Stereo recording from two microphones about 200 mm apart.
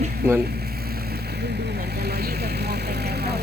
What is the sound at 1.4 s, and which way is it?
Speech, 55° right (ahead or behind).